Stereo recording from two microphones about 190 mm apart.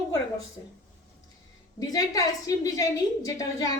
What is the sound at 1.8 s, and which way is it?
A woman's voice, 20° left (ahead or behind).